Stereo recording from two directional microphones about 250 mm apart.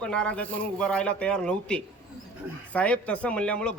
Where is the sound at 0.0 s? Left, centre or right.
Centre.